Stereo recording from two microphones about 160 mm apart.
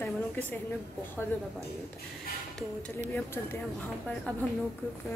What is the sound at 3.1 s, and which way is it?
Speech, 15° left (ahead or behind).